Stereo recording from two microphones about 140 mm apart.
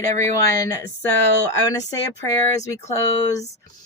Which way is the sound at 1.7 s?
25° left (ahead or behind).